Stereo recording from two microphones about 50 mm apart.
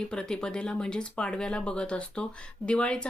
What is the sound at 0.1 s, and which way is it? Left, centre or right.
Speech, centre.